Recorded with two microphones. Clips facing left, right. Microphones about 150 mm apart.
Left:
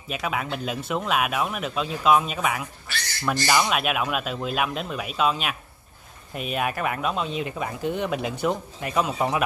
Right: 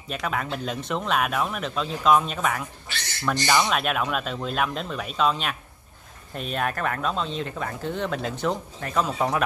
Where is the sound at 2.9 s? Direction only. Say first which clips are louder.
Left 2 dB; 20° right (ahead or behind).